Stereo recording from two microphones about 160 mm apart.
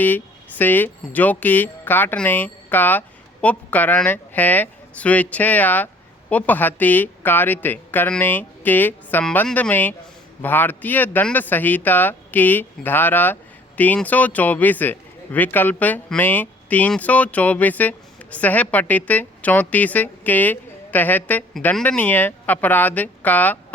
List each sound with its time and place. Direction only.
0.0 s speech: 10° left (ahead or behind)